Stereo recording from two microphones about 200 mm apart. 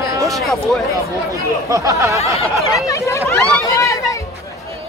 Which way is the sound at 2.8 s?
15° left (ahead or behind).